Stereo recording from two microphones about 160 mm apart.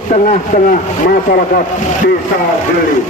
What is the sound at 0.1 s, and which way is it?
A man's voice, 50° left (ahead or behind).